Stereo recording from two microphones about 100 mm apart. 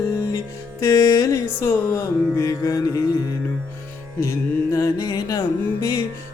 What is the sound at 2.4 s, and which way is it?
Music, 35° left (ahead or behind).